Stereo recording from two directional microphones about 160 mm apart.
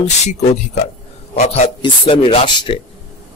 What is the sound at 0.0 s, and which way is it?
Speech, 45° left (ahead or behind).